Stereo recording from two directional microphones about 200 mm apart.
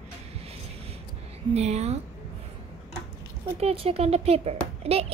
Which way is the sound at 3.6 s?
30° right (ahead or behind).